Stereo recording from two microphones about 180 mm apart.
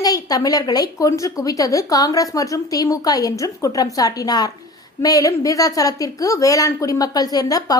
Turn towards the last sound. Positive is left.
turn(degrees=20)  # may be behind; listen again after turning